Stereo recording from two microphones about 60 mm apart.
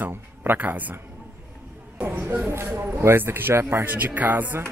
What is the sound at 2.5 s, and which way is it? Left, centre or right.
Speech, right.